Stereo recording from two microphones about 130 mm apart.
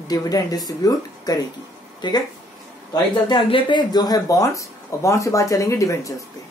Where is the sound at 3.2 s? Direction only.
40° left (ahead or behind).